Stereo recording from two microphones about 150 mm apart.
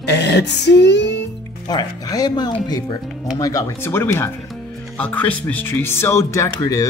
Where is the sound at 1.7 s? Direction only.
25° left (ahead or behind).